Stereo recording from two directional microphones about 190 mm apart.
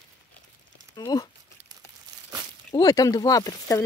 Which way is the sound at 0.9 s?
20° left (ahead or behind).